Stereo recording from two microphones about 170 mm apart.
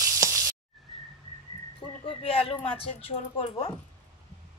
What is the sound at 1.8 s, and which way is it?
Speech, 35° left (ahead or behind).